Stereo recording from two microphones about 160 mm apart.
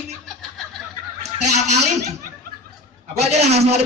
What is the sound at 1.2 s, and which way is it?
Fowl, 45° right (ahead or behind).